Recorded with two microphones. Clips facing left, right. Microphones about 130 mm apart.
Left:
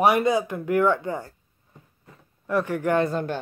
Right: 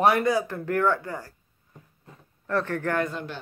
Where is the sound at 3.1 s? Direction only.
45° left (ahead or behind).